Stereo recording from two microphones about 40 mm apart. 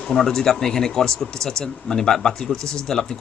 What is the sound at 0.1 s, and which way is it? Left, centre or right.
Speech, centre.